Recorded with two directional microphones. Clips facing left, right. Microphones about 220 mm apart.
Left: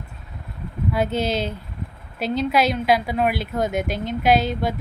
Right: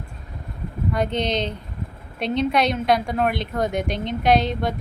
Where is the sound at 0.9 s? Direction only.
5° left (ahead or behind).